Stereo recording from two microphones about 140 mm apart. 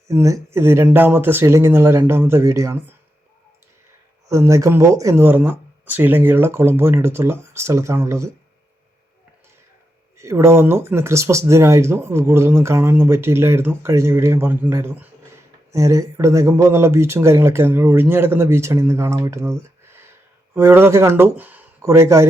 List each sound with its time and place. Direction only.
0.1 s speech: 20° right (ahead or behind)
4.3 s speech: 20° right (ahead or behind)
10.2 s speech: 20° right (ahead or behind)